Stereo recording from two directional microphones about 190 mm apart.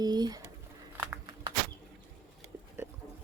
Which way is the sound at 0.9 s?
10° right (ahead or behind).